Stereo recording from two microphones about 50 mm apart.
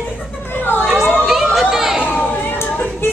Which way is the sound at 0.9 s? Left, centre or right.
Centre.